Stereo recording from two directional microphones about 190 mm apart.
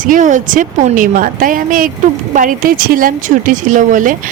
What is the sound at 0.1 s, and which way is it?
A woman's voice, 40° right (ahead or behind).